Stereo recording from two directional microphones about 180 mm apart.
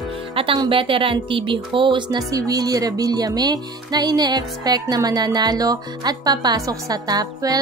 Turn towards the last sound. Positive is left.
turn(degrees=-20)  # may be behind; listen again after turning